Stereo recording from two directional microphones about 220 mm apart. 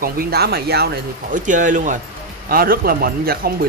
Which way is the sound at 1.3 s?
35° right (ahead or behind).